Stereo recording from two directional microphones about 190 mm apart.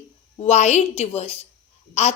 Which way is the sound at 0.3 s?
35° left (ahead or behind).